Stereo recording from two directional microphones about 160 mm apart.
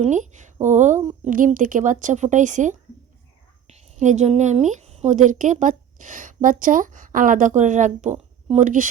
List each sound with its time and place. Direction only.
0.0 s a woman's voice: 50° right (ahead or behind)